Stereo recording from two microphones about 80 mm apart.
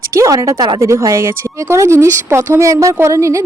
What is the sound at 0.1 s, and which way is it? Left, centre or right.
Speech, right.